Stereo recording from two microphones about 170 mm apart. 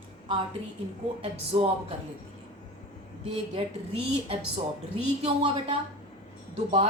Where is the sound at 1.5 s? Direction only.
35° right (ahead or behind).